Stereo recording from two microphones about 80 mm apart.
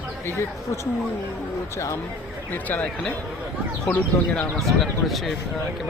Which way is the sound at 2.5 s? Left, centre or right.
Left.